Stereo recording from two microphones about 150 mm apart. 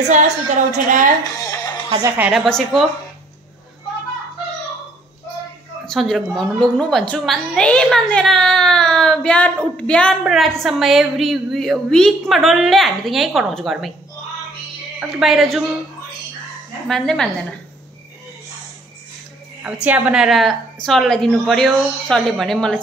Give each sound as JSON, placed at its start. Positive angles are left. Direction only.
{"t": 0.7, "sound": "a woman's voice", "side_deg": -60}
{"t": 1.4, "sound": "music", "side_deg": 25}
{"t": 1.9, "sound": "a woman's voice", "side_deg": -20}
{"t": 2.1, "sound": "a woman's voice", "side_deg": -5}
{"t": 5.9, "sound": "a woman's voice", "side_deg": 0}
{"t": 15.0, "sound": "a woman's voice", "side_deg": -5}
{"t": 16.8, "sound": "a woman's voice", "side_deg": 5}
{"t": 19.6, "sound": "a woman's voice", "side_deg": -10}